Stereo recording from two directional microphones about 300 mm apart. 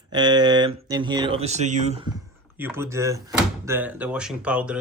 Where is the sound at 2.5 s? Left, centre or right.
Centre.